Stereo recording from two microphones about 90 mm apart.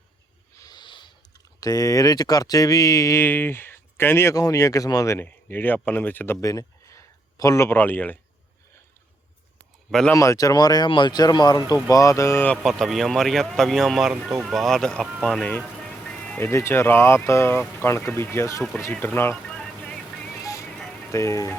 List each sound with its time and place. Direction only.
0.6 s a sound: 55° left (ahead or behind)
1.6 s speech: 40° left (ahead or behind)
5.2 s speech: 20° left (ahead or behind)
6.4 s a sound: 40° left (ahead or behind)
7.8 s speech: 20° left (ahead or behind)
10.1 s speech: 35° left (ahead or behind)
10.8 s speech: 60° left (ahead or behind); by 12.5 s 30° left (ahead or behind)
12.6 s speech: centre (ahead or behind)
16.0 s music: 10° left (ahead or behind)
16.4 s speech: 30° left (ahead or behind)
19.5 s vehicle: 10° left (ahead or behind)
20.4 s music: 40° left (ahead or behind)
20.7 s music: 5° left (ahead or behind)
21.1 s speech: 35° left (ahead or behind)